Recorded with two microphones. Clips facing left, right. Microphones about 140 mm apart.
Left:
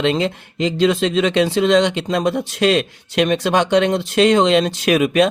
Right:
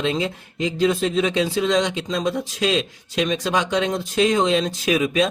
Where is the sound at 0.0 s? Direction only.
75° left (ahead or behind).